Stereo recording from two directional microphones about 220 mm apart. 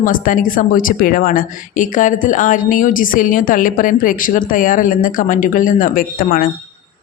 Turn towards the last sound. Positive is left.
turn(degrees=40)  # may be behind; listen again after turning